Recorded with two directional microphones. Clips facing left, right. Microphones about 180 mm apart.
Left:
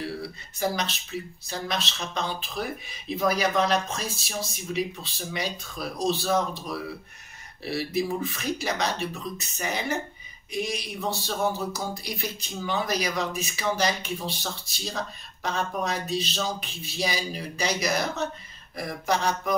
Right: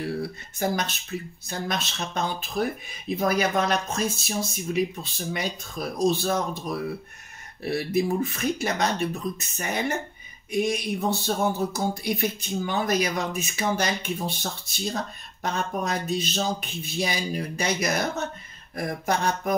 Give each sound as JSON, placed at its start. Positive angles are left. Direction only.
{"t": 0.6, "sound": "speech", "side_deg": -50}